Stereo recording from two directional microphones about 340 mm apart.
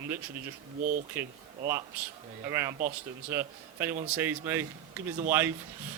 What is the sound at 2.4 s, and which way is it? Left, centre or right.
Speech, centre.